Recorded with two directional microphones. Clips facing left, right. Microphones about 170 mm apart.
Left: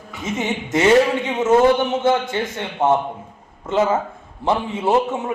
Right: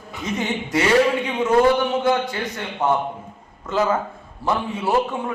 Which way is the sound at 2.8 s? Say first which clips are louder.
Left 3 dB; 25° left (ahead or behind).